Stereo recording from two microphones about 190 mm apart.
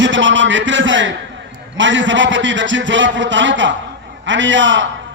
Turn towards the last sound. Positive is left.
turn(degrees=-75)  # may be behind; listen again after turning